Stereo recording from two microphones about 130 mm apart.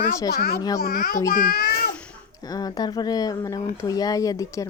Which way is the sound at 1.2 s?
90° left.